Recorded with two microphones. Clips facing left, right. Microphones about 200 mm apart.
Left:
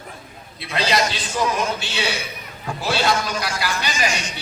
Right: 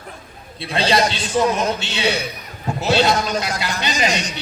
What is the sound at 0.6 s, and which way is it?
A man's voice, 30° right (ahead or behind).